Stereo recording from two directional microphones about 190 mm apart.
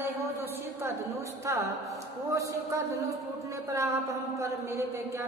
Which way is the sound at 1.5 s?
15° right (ahead or behind).